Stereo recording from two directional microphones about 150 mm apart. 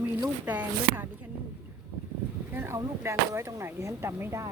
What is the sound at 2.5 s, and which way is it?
Speech, 15° right (ahead or behind).